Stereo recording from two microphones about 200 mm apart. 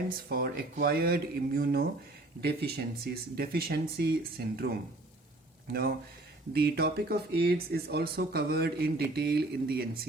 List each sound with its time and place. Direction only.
0.3 s speech: 50° right (ahead or behind)
6.5 s speech: 50° right (ahead or behind)